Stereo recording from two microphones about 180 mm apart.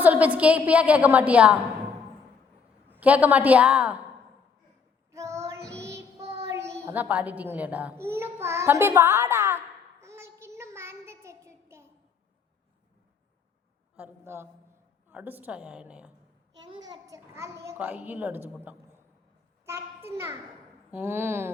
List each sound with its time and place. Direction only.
0.0 s a child's voice: 10° right (ahead or behind)
2.9 s a child's voice: 10° right (ahead or behind)
5.1 s child singing: 15° right (ahead or behind)
6.7 s a child's voice: 15° right (ahead or behind)
10.0 s child singing: 15° right (ahead or behind)
13.9 s a woman's voice: 10° right (ahead or behind)
16.6 s a child's voice: 25° right (ahead or behind); by 18.3 s 10° right (ahead or behind)
19.6 s a child's voice: 15° right (ahead or behind)